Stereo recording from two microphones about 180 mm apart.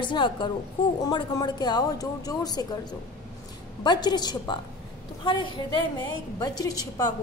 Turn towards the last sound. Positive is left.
turn(degrees=20)  # may be behind; listen again after turning